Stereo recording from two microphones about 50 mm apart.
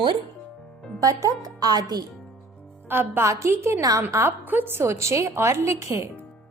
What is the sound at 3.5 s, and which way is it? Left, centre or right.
Speech, right.